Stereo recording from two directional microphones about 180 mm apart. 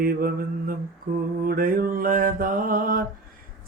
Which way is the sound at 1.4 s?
50° right (ahead or behind).